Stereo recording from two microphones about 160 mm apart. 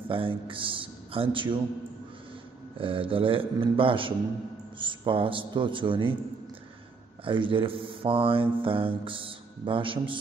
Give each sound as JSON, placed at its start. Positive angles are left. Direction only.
{"t": 0.1, "sound": "a man's voice", "side_deg": -35}
{"t": 2.8, "sound": "mantra", "side_deg": -35}
{"t": 7.2, "sound": "mantra", "side_deg": -30}